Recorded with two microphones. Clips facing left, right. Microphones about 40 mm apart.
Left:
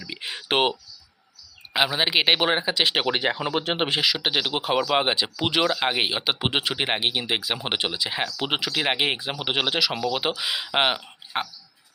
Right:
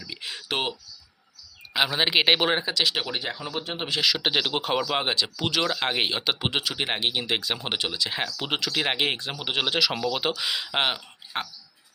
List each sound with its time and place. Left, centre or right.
0.0 s a sound: left
0.4 s speech: left
1.7 s speech: centre
2.7 s speech: left
3.1 s speech: left
4.0 s speech: centre
4.9 s speech: centre
5.6 s speech: centre
6.5 s speech: left